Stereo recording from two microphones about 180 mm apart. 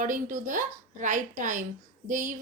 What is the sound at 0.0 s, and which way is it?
Speech, 45° right (ahead or behind).